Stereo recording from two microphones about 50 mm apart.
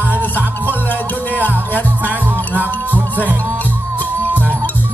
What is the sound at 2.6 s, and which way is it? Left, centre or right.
Music, right.